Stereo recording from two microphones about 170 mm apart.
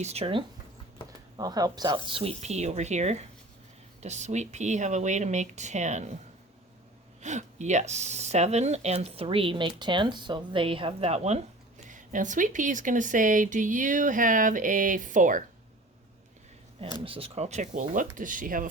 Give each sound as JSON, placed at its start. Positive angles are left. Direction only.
{"t": 0.0, "sound": "speech", "side_deg": -35}
{"t": 1.4, "sound": "speech", "side_deg": -20}
{"t": 7.2, "sound": "speech", "side_deg": -45}
{"t": 17.0, "sound": "speech", "side_deg": -35}